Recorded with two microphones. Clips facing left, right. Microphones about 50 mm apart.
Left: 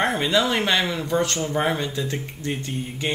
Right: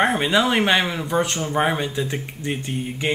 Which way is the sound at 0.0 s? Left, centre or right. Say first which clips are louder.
Right 2 dB; centre.